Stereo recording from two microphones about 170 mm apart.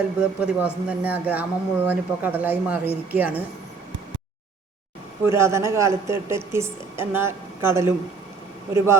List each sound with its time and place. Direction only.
0.2 s speech: 10° right (ahead or behind)
5.2 s speech: 15° right (ahead or behind)